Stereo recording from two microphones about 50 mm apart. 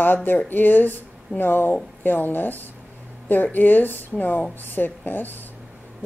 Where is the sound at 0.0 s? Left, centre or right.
Left.